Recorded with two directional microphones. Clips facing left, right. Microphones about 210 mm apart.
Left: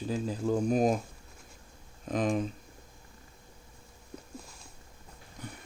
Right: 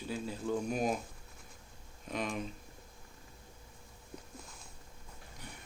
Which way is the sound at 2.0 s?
40° left (ahead or behind).